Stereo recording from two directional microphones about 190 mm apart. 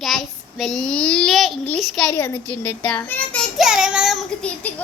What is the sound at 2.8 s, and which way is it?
A child's voice, 5° left (ahead or behind).